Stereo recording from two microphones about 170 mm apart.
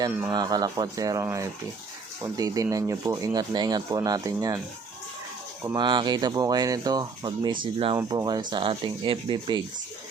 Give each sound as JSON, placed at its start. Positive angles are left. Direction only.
{"t": 0.3, "sound": "speech", "side_deg": -20}
{"t": 5.6, "sound": "speech", "side_deg": -25}